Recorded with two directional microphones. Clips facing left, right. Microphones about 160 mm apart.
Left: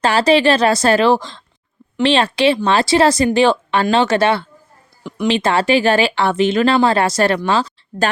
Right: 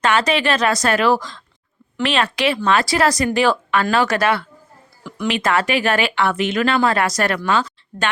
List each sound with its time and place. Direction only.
0.0 s a woman's voice: 30° left (ahead or behind)